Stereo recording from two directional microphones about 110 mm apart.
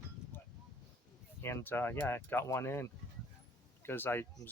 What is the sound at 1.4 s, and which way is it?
Speech, 20° left (ahead or behind).